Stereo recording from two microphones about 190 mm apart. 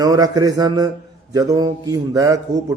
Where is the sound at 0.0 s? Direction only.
20° right (ahead or behind).